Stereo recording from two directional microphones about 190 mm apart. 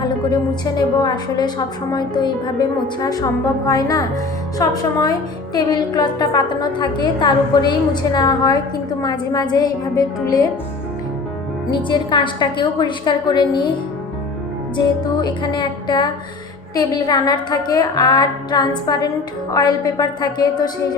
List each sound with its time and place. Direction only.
0.0 s a woman's voice: 20° left (ahead or behind)
11.7 s a woman's voice: 25° left (ahead or behind)
14.8 s a woman's voice: 20° left (ahead or behind)